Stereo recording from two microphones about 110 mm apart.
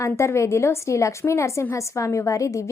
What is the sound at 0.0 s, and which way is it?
A woman's voice, 25° left (ahead or behind).